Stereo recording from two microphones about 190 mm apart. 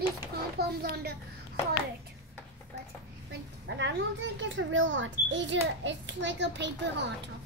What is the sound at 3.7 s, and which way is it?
Speech, 65° right (ahead or behind).